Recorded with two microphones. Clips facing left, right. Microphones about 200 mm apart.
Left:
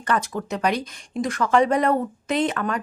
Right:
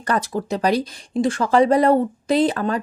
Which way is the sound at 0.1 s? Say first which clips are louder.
Right 3 dB; 35° right (ahead or behind).